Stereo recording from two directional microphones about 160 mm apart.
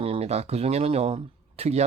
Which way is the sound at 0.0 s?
40° right (ahead or behind).